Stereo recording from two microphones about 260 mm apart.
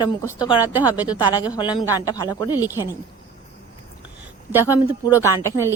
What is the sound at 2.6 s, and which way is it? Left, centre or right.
Speech, centre.